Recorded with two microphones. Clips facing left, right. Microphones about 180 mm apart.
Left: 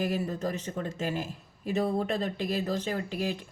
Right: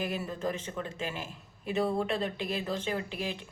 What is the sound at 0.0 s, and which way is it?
Speech, 40° left (ahead or behind).